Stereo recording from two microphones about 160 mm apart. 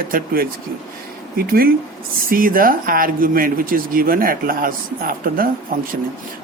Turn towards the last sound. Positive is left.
turn(degrees=-60)  # may be behind; listen again after turning